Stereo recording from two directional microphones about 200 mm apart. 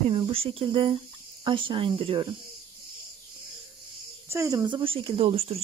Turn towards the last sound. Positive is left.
turn(degrees=-30)  # may be behind; listen again after turning